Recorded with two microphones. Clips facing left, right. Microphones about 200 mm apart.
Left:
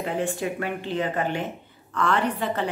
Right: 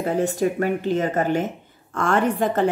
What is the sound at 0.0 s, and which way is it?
Speech, 40° right (ahead or behind).